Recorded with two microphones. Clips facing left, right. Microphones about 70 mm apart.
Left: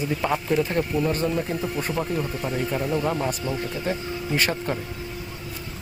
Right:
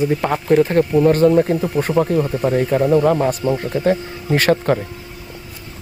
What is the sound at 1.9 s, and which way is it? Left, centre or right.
Speech, right.